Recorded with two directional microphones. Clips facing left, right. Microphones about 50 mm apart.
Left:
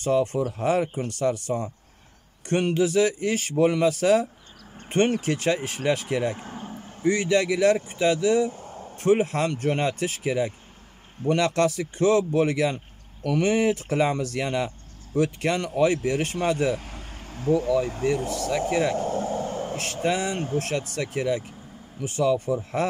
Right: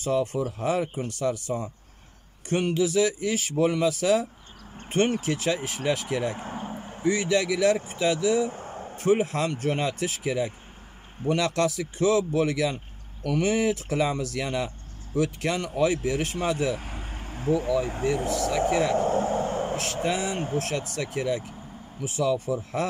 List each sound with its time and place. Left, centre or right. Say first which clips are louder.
0.0 s a man's voice: left 3 dB; left
6.3 s a sound: right 3 dB; centre
7.1 s speech: left 2 dB; left
8.5 s a sound: even; right
9.1 s a man's voice: left 2 dB; left
16.7 s speech: left 1 dB; centre
18.1 s a sound: even; right
20.2 s speech: left 1 dB; centre
20.9 s speech: left 2 dB; left